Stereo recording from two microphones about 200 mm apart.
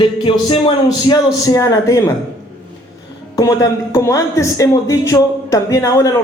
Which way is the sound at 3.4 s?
15° left (ahead or behind).